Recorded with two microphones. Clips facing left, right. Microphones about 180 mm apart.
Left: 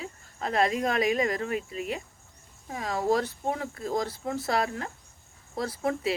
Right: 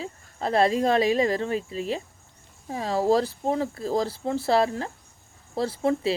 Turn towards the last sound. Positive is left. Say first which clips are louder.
# right 5 dB
turn(degrees=-30)  # may be behind; listen again after turning